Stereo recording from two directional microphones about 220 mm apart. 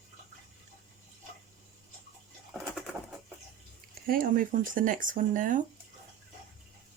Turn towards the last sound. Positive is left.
turn(degrees=-35)  # may be behind; listen again after turning